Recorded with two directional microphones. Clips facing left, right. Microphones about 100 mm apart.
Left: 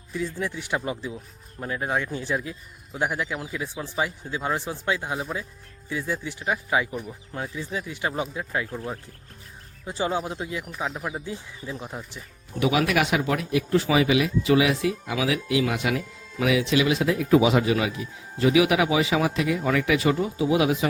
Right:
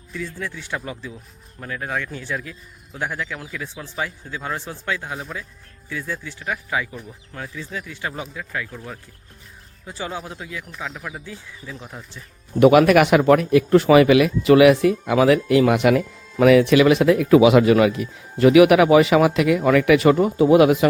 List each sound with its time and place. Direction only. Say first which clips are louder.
0.1 s speech: left 1 dB; 20° left (ahead or behind)
12.5 s speech: right 10 dB; 55° right (ahead or behind)